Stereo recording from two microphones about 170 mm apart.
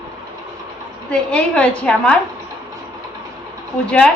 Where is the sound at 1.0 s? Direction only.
5° left (ahead or behind).